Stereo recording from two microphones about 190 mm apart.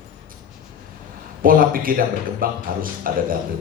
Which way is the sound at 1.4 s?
50° right (ahead or behind).